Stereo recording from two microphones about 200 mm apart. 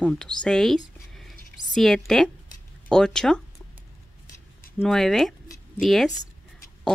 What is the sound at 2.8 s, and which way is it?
Speech, 5° left (ahead or behind).